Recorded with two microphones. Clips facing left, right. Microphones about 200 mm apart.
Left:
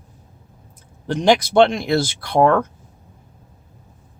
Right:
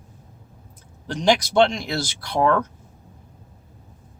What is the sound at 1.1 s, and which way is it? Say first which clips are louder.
Speech: left 4 dB; 55° left (ahead or behind).